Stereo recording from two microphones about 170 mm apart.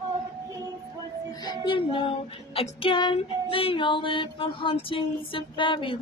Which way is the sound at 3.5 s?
30° left (ahead or behind).